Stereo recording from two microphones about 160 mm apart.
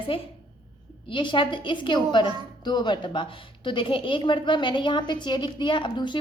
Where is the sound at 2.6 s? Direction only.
25° left (ahead or behind).